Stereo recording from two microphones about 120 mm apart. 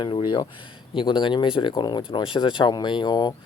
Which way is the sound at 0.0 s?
40° left (ahead or behind).